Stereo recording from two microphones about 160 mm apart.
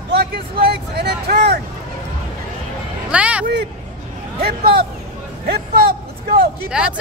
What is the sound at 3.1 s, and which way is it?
Speech, 5° right (ahead or behind).